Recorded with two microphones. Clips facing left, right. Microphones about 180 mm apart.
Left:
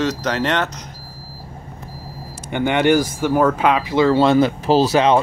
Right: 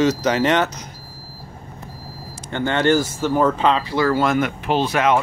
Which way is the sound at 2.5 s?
15° left (ahead or behind).